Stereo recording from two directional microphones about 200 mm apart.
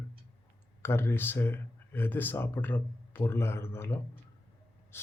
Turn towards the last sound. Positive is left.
turn(degrees=10)  # may be behind; listen again after turning